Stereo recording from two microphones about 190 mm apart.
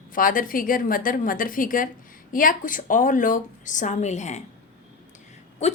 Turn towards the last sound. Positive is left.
turn(degrees=35)  # may be behind; listen again after turning